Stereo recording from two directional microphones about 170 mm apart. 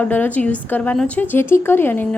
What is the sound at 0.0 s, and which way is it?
A woman's voice, 10° left (ahead or behind).